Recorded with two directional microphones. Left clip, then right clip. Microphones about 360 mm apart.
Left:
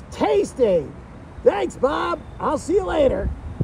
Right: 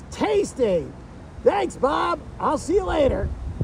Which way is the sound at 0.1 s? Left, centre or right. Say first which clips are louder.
Left 2 dB; centre.